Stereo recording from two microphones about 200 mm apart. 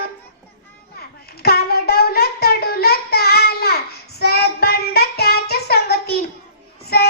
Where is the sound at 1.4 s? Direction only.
50° left (ahead or behind).